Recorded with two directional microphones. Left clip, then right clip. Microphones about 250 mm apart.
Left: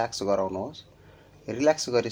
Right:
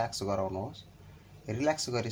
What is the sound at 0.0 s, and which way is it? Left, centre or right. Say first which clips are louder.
Speech: left 6 dB; left.